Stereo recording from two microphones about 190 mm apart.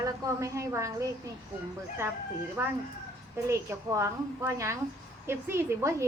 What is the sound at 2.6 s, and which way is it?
A woman's voice, 10° right (ahead or behind).